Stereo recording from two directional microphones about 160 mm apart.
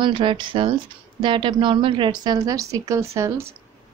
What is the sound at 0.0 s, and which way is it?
A woman's voice, 30° right (ahead or behind).